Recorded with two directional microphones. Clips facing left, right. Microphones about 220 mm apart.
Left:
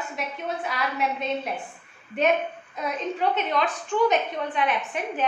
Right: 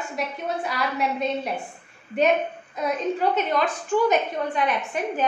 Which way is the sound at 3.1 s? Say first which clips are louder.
Right 2 dB; centre (ahead or behind).